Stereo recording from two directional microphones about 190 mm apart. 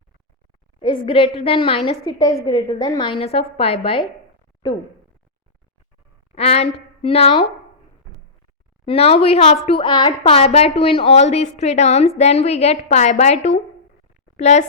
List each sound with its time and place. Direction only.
1.0 s a woman's voice: 30° left (ahead or behind)
6.3 s a woman's voice: 35° left (ahead or behind)
8.9 s a woman's voice: 30° left (ahead or behind)